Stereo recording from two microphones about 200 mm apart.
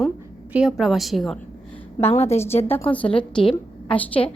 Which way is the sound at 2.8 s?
5° left (ahead or behind).